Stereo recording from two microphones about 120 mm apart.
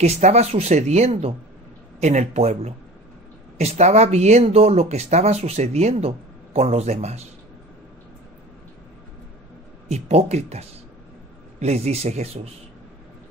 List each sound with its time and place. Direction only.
0.0 s speech: 65° right (ahead or behind)
9.8 s speech: 65° right (ahead or behind)